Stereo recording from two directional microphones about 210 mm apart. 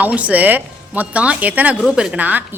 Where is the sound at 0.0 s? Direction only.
5° right (ahead or behind).